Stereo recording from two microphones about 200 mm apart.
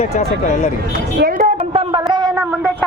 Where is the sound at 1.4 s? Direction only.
25° right (ahead or behind).